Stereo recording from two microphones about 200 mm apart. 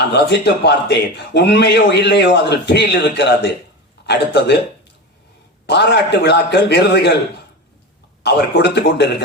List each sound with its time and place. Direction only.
0.1 s a man's voice: 55° left (ahead or behind)
5.6 s a man's voice: 55° left (ahead or behind)
8.2 s a man's voice: 55° left (ahead or behind)